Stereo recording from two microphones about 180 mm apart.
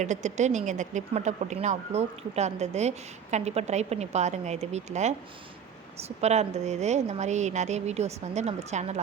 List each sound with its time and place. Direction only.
0.0 s a woman's voice: 40° right (ahead or behind)